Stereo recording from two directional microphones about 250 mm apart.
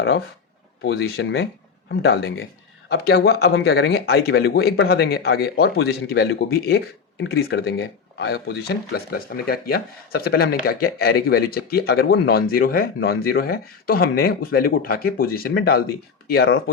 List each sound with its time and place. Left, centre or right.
0.8 s speech: left